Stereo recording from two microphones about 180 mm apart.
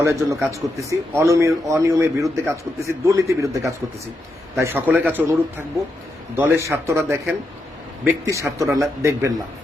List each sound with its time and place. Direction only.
0.0 s a man's voice: 15° right (ahead or behind)
4.5 s a man's voice: 15° right (ahead or behind)